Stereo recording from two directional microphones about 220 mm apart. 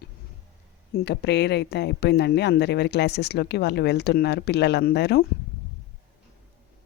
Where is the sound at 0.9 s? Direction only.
50° left (ahead or behind).